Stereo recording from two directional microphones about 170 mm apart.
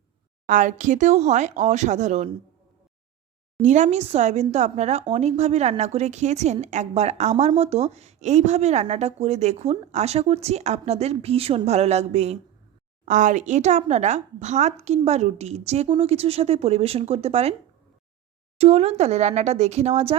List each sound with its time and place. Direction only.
0.4 s speech: 50° right (ahead or behind)
3.6 s speech: 45° right (ahead or behind)
18.5 s speech: 35° right (ahead or behind)